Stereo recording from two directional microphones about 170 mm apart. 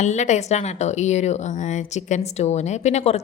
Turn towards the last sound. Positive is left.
turn(degrees=40)  # may be behind; listen again after turning